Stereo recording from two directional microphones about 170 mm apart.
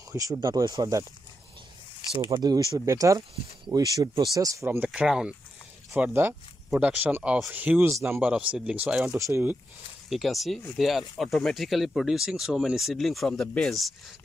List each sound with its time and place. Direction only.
0.1 s speech: 20° right (ahead or behind)
2.1 s speech: 20° right (ahead or behind)
10.0 s speech: centre (ahead or behind)